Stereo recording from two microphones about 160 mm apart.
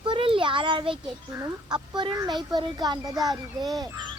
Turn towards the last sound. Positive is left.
turn(degrees=-25)  # may be behind; listen again after turning